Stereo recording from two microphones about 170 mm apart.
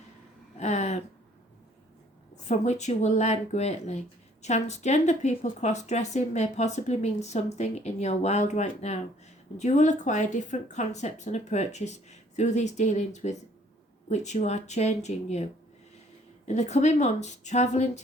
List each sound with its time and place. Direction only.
0.6 s a sound: 40° left (ahead or behind)
2.3 s speech: 45° left (ahead or behind)
16.5 s speech: 40° left (ahead or behind)